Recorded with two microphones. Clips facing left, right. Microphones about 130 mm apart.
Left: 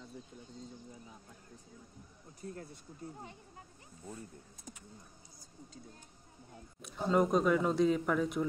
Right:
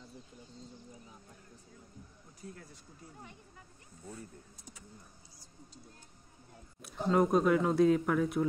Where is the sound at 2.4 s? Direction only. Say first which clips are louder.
Left 3 dB; 35° left (ahead or behind).